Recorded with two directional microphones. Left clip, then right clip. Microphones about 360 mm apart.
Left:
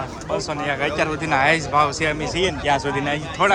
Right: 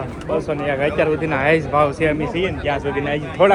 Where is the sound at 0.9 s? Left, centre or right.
Centre.